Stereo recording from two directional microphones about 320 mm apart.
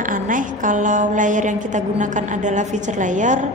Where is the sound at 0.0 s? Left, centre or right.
Right.